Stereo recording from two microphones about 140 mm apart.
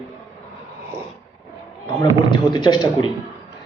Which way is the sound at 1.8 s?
35° left (ahead or behind).